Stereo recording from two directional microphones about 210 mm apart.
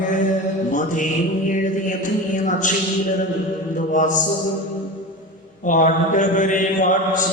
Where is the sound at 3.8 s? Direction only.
35° left (ahead or behind).